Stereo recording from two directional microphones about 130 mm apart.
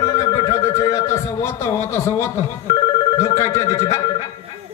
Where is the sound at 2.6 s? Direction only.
30° left (ahead or behind).